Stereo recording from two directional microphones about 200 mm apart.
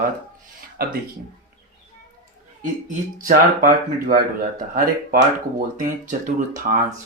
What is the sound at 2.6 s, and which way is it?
Speech, 40° right (ahead or behind).